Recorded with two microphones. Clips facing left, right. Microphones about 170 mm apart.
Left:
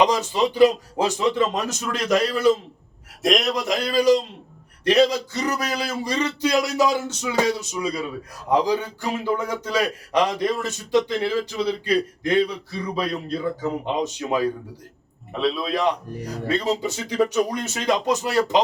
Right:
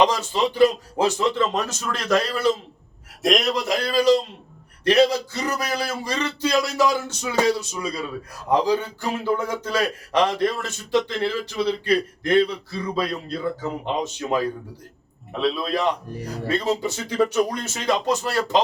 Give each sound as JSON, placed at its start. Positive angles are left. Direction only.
{"t": 0.0, "sound": "speech", "side_deg": 15}
{"t": 3.2, "sound": "a man's voice", "side_deg": 0}
{"t": 3.8, "sound": "speech", "side_deg": 15}
{"t": 15.3, "sound": "a man's voice", "side_deg": 0}
{"t": 16.5, "sound": "speech", "side_deg": 15}